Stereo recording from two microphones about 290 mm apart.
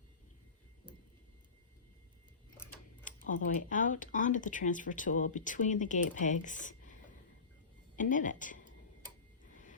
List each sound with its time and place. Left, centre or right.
3.1 s a sound: left
3.4 s speech: left
7.9 s a woman's voice: left